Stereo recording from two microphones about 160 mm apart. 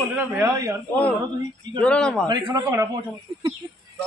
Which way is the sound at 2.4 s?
15° right (ahead or behind).